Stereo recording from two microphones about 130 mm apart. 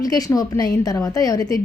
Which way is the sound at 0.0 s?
30° left (ahead or behind).